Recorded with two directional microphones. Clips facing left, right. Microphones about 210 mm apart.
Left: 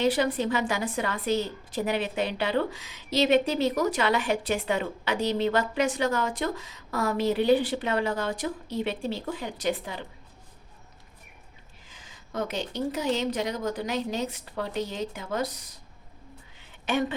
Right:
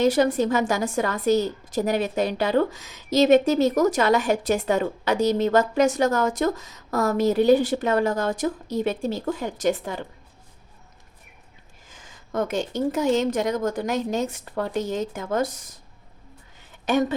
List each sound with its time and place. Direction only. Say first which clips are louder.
0.0 s a woman's voice: right 5 dB; 45° right (ahead or behind)
11.9 s a woman's voice: right 7 dB; 50° right (ahead or behind)
16.6 s a sound: right 5 dB; 40° right (ahead or behind)